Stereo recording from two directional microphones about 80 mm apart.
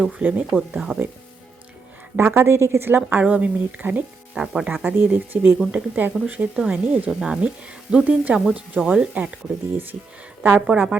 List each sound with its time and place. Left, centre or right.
0.0 s speech: centre
2.1 s speech: right; by 4.7 s centre
4.7 s speech: right
10.4 s speech: centre